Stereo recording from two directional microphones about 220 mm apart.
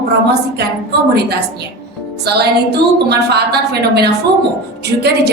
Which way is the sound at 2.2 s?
50° right (ahead or behind).